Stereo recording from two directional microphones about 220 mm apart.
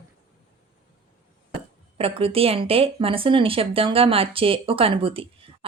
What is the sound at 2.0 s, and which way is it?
A woman's voice, 25° right (ahead or behind).